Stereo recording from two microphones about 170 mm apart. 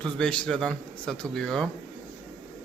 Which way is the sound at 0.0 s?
5° left (ahead or behind).